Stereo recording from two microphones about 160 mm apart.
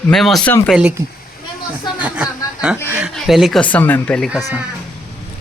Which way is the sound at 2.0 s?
10° right (ahead or behind).